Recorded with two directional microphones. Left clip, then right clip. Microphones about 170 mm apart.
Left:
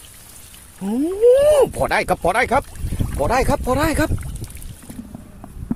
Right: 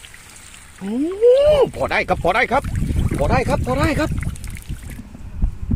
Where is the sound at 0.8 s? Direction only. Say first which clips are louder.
Even; 15° left (ahead or behind).